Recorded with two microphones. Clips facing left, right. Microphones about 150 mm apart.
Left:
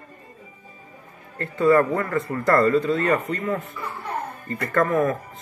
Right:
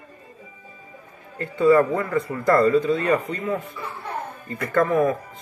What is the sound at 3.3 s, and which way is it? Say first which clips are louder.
Speech: even; 15° right (ahead or behind).